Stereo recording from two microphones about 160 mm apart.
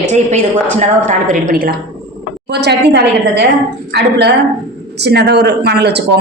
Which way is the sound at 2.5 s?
90° right.